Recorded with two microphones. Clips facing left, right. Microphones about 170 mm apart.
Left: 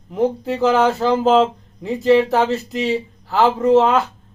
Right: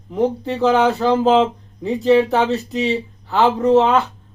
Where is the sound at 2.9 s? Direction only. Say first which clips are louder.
Even; centre (ahead or behind).